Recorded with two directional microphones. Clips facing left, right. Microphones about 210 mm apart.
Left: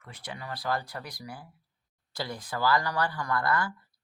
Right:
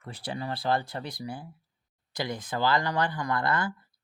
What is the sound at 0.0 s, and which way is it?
Speech, 30° right (ahead or behind).